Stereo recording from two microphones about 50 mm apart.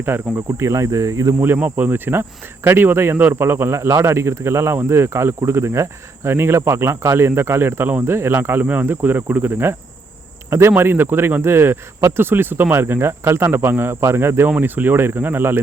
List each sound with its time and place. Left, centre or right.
0.0 s a man's voice: right
0.6 s speech: right
1.5 s a man's voice: right
3.8 s speech: right
6.3 s a man's voice: right
8.6 s speech: right
8.9 s a man's voice: right
14.6 s a man's voice: right